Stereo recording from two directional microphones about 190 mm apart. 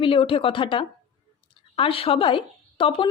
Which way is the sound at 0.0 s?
25° left (ahead or behind).